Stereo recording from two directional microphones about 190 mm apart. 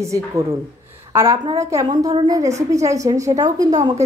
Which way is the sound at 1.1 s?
15° right (ahead or behind).